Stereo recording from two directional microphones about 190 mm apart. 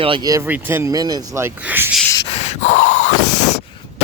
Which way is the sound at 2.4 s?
40° left (ahead or behind).